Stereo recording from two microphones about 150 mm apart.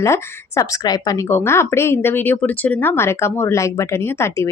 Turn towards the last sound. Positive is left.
turn(degrees=20)  # may be behind; listen again after turning